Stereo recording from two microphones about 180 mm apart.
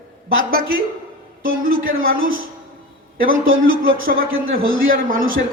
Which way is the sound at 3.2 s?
90° right.